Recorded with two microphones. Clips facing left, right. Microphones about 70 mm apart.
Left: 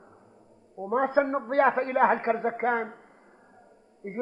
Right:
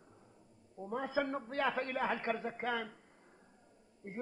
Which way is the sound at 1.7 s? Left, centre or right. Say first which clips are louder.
Left 13 dB; left.